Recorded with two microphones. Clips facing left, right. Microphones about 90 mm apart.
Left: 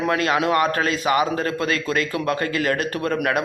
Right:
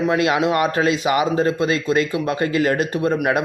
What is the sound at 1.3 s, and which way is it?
Speech, 20° right (ahead or behind).